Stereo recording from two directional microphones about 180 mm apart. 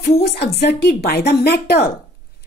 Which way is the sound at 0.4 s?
65° left (ahead or behind).